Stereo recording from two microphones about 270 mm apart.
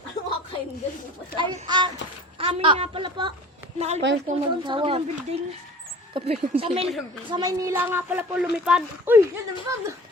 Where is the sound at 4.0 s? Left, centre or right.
Right.